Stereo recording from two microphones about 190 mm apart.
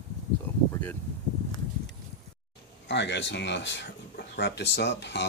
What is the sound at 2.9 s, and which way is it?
Speech, 65° left (ahead or behind).